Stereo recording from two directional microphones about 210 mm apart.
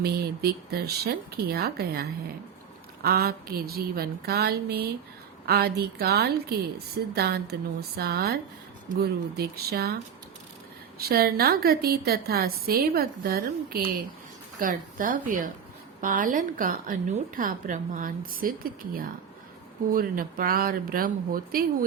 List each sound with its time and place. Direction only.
0.0 s a woman's voice: 50° right (ahead or behind)